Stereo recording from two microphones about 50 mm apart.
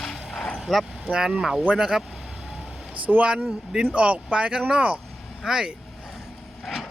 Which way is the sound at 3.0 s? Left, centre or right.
Right.